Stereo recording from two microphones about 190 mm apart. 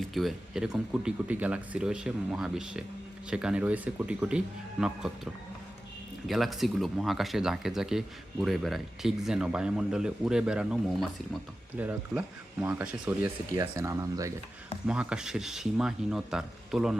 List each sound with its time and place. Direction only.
0.0 s speech: centre (ahead or behind)
13.5 s speech: 20° right (ahead or behind)
14.8 s speech: 5° right (ahead or behind)